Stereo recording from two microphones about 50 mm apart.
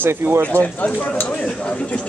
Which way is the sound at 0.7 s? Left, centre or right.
Left.